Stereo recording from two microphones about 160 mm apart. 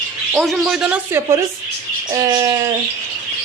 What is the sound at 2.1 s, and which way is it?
Bird, 25° right (ahead or behind).